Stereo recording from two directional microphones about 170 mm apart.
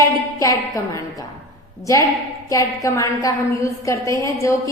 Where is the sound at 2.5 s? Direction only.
20° left (ahead or behind).